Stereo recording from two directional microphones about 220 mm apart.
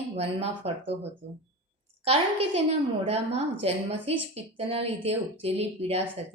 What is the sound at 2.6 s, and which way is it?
A woman's voice, 30° right (ahead or behind).